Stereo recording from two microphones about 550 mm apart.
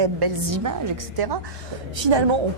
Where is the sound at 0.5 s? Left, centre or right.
Right.